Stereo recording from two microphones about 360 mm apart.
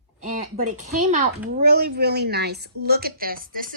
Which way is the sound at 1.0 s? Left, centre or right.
Centre.